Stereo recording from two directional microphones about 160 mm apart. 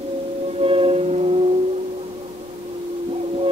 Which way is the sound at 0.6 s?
35° right (ahead or behind).